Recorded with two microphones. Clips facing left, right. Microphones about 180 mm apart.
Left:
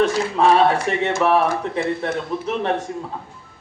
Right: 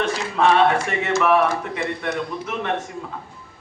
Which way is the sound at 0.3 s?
35° left (ahead or behind).